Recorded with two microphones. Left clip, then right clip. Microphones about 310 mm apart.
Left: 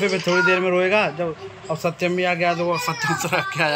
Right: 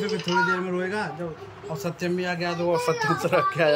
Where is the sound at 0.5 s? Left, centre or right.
Centre.